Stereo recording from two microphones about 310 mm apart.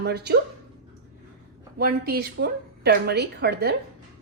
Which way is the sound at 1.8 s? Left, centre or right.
Right.